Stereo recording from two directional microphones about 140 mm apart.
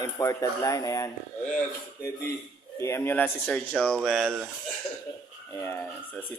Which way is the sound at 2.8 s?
20° left (ahead or behind).